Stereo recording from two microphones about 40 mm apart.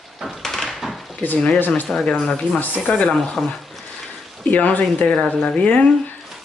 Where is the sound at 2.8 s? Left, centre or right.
Left.